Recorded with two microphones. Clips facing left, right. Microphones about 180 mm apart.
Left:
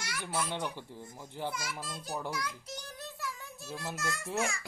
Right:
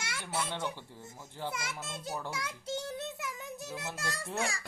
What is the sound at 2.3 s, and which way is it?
Child singing, 25° right (ahead or behind).